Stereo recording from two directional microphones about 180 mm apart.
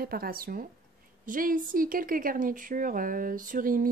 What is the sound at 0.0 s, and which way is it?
A woman's voice, 55° right (ahead or behind).